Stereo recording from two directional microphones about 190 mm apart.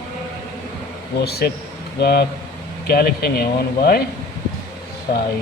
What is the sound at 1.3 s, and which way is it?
Speech, 55° left (ahead or behind).